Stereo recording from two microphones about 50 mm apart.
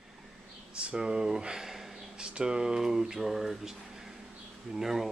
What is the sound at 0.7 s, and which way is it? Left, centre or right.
Speech, centre.